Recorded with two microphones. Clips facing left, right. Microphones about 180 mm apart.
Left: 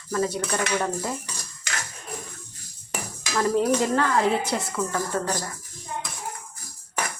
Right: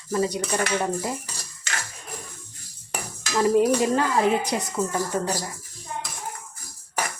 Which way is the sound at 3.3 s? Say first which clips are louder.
Right 2 dB; 15° right (ahead or behind).